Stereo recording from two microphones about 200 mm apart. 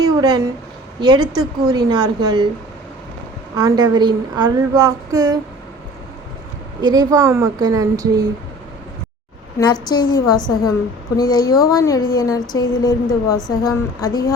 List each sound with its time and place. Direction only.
0.0 s a sound: 20° right (ahead or behind)
0.9 s a woman's voice: 20° right (ahead or behind)
3.5 s a woman's voice: 20° right (ahead or behind)
6.8 s a woman's voice: 20° right (ahead or behind)
9.8 s a woman's voice: 20° left (ahead or behind)